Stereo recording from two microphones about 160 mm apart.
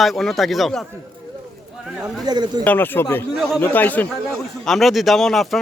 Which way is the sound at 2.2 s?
25° right (ahead or behind).